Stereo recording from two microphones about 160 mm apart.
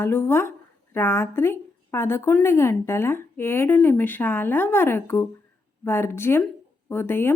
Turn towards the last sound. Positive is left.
turn(degrees=15)  # may be behind; listen again after turning